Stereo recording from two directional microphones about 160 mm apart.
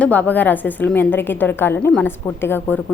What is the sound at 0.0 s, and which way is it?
A woman's voice, 10° left (ahead or behind).